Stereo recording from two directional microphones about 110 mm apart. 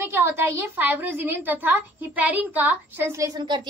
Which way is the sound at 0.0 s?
20° right (ahead or behind).